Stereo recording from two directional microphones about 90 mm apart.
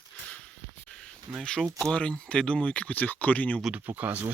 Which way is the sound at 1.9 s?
10° left (ahead or behind).